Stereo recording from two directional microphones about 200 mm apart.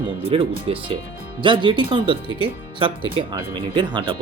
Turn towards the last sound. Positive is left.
turn(degrees=-20)  # may be behind; listen again after turning